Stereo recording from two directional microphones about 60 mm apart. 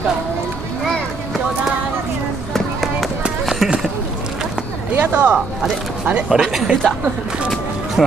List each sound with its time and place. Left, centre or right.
2.5 s run: centre
4.9 s speech: right
6.2 s speech: centre